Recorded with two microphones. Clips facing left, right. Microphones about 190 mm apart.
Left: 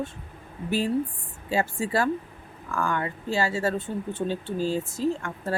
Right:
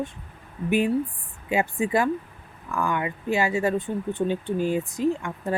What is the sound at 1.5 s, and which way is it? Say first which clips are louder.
Speech: right 2 dB; 20° right (ahead or behind).